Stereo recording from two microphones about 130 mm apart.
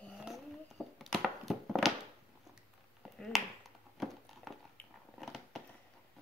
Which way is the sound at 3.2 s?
Centre (ahead or behind).